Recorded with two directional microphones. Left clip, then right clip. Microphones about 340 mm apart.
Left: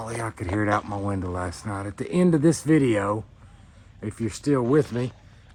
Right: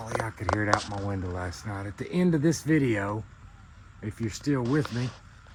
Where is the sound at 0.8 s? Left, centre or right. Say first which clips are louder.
Left 4 dB; left.